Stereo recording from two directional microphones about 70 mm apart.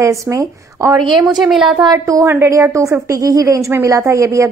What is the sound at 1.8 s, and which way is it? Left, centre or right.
Speech, right.